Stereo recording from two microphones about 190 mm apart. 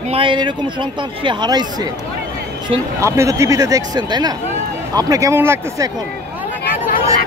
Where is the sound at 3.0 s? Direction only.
15° right (ahead or behind).